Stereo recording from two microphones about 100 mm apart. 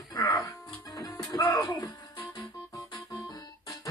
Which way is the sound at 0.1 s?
40° left (ahead or behind).